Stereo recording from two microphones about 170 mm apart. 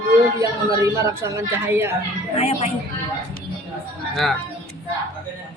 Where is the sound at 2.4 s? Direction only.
35° left (ahead or behind).